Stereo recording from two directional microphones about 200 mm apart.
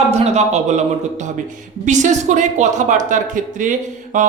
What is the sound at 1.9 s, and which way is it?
Speech, 35° right (ahead or behind).